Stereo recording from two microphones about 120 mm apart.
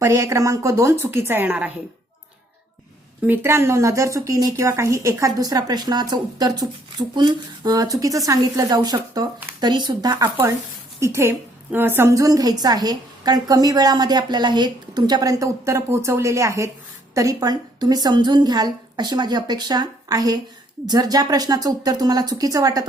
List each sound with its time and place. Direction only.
0.0 s speech: 25° right (ahead or behind)
3.2 s a woman's voice: 20° right (ahead or behind)
11.0 s a woman's voice: 20° right (ahead or behind)